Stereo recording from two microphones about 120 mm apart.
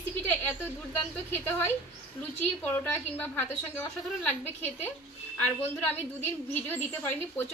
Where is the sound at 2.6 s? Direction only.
15° left (ahead or behind).